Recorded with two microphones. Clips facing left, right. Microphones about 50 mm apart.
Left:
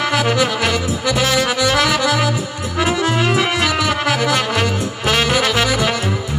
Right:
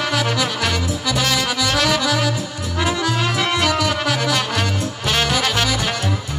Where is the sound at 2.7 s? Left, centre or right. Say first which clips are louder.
Left 3 dB; left.